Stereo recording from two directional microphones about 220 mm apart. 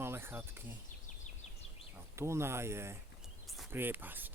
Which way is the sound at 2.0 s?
10° right (ahead or behind).